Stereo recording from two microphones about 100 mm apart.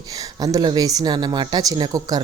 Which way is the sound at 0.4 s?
45° right (ahead or behind).